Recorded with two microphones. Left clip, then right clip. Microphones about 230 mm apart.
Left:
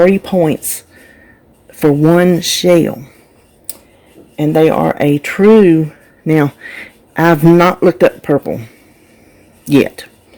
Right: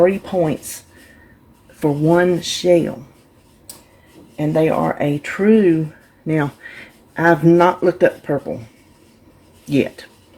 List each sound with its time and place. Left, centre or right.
0.0 s speech: left
1.8 s speech: left
4.4 s speech: left
9.6 s speech: left